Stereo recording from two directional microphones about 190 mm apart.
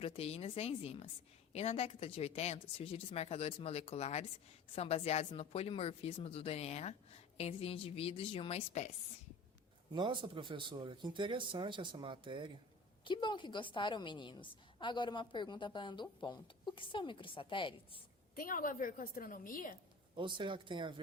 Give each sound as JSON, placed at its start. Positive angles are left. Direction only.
{"t": 0.0, "sound": "speech", "side_deg": 30}
{"t": 9.9, "sound": "speech", "side_deg": -25}
{"t": 13.1, "sound": "a woman's voice", "side_deg": 25}
{"t": 18.3, "sound": "a woman's voice", "side_deg": 45}
{"t": 20.1, "sound": "speech", "side_deg": -25}